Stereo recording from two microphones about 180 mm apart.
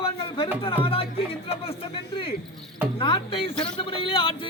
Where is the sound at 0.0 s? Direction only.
30° left (ahead or behind).